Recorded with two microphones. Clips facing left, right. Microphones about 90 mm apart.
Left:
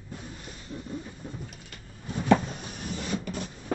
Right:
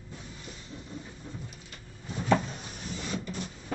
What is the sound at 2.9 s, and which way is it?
Printer, 55° left (ahead or behind).